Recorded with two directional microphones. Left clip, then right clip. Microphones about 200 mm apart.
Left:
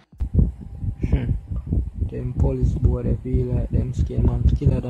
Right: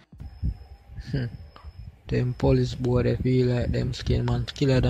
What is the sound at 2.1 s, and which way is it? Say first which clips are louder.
Speech: right 4 dB; 15° right (ahead or behind).